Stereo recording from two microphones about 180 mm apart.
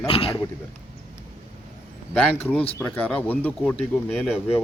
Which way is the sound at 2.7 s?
10° left (ahead or behind).